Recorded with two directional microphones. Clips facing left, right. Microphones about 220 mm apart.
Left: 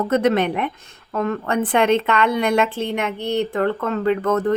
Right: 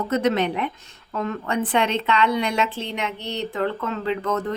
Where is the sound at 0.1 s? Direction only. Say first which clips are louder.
Left 2 dB; 55° left (ahead or behind).